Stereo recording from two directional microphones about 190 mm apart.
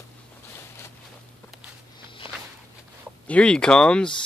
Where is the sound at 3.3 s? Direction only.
5° left (ahead or behind).